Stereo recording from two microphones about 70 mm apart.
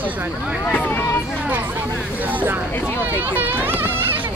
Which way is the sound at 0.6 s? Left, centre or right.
Left.